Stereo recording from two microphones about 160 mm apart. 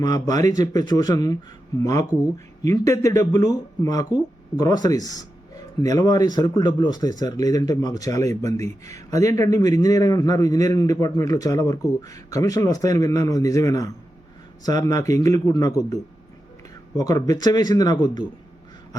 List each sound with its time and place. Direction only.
0.0 s speech: 25° left (ahead or behind)